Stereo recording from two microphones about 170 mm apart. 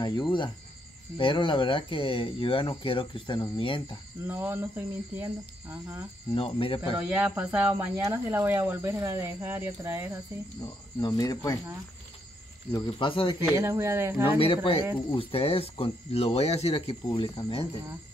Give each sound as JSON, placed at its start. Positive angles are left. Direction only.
{"t": 0.0, "sound": "speech", "side_deg": 25}
{"t": 4.3, "sound": "speech", "side_deg": -10}
{"t": 6.3, "sound": "speech", "side_deg": 35}
{"t": 7.0, "sound": "speech", "side_deg": -10}
{"t": 11.0, "sound": "speech", "side_deg": 20}
{"t": 12.7, "sound": "speech", "side_deg": 25}
{"t": 13.6, "sound": "speech", "side_deg": -15}
{"t": 14.4, "sound": "speech", "side_deg": 35}